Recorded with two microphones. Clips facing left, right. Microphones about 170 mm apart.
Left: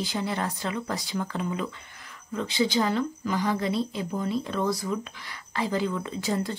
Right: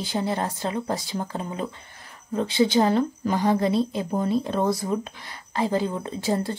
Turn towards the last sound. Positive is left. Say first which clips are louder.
# right 3 dB
turn(degrees=-30)  # may be behind; listen again after turning